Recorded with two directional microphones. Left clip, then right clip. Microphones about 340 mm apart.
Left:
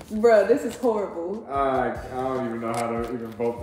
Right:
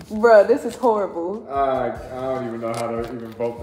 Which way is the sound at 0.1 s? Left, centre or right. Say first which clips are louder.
Right 3 dB; centre.